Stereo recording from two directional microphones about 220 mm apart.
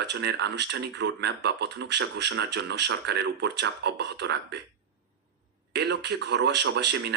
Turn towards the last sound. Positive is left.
turn(degrees=-50)  # may be behind; listen again after turning